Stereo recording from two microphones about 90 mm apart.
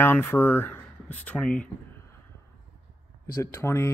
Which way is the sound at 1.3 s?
10° left (ahead or behind).